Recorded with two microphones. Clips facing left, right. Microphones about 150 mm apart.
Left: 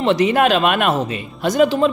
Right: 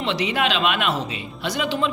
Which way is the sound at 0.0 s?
45° left (ahead or behind).